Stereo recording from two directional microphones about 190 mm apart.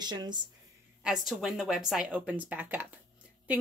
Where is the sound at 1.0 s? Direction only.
Centre (ahead or behind).